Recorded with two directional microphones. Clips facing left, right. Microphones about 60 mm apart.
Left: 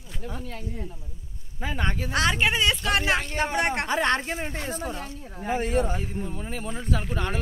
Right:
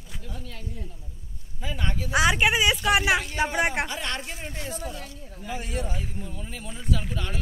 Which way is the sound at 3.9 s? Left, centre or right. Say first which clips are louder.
Left 8 dB; left.